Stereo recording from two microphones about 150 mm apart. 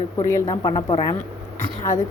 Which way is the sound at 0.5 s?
30° left (ahead or behind).